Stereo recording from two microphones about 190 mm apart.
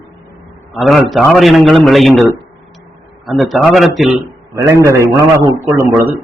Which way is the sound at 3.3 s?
Centre (ahead or behind).